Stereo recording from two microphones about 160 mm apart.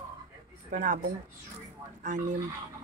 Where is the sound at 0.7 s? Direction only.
55° right (ahead or behind).